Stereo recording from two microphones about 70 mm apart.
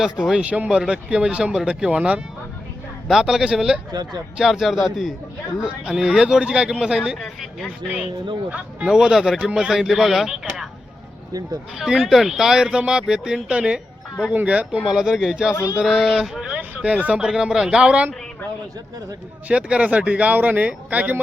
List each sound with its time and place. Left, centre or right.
0.0 s speech: centre
8.4 s speech: centre
11.8 s speech: centre
14.8 s speech: centre
16.6 s speech: centre
19.5 s speech: centre